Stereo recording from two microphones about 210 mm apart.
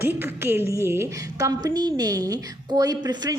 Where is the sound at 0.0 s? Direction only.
10° right (ahead or behind).